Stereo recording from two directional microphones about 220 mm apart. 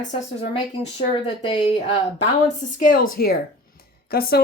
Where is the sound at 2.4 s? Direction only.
40° left (ahead or behind).